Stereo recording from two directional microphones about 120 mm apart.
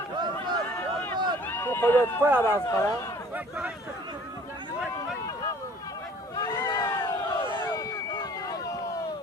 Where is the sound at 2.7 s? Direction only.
25° left (ahead or behind).